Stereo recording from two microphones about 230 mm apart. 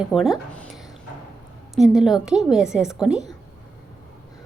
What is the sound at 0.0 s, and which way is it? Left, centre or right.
A woman's voice, centre.